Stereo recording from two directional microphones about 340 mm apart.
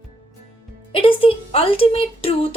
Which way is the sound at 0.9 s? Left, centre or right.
Centre.